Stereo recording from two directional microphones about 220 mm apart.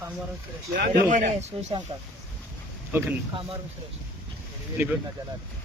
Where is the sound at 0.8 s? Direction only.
40° right (ahead or behind).